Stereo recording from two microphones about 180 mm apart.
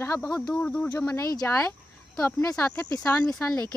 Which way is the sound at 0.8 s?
20° left (ahead or behind).